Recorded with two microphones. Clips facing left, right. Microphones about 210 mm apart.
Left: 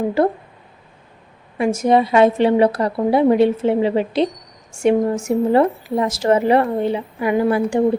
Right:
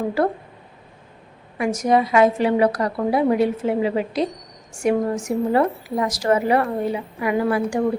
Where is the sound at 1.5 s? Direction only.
25° left (ahead or behind).